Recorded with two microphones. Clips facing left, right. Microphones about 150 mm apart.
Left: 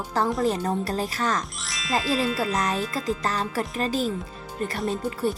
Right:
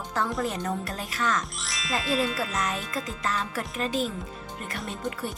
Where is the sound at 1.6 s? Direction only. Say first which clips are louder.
Left 4 dB; centre (ahead or behind).